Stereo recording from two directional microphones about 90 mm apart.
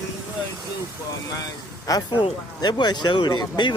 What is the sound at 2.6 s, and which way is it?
Speech, 50° left (ahead or behind).